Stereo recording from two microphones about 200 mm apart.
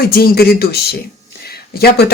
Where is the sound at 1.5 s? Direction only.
50° left (ahead or behind).